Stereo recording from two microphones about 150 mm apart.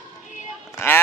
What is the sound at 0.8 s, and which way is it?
Sheep, 15° left (ahead or behind).